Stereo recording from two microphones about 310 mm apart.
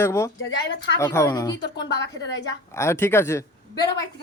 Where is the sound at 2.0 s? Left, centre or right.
Left.